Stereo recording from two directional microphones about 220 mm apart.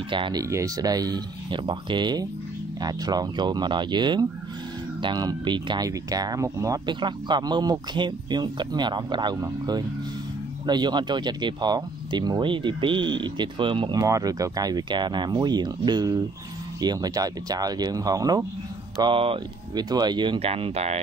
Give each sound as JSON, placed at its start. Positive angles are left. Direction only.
{"t": 0.1, "sound": "speech", "side_deg": -20}